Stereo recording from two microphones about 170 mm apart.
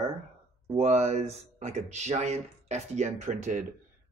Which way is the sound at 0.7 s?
40° right (ahead or behind).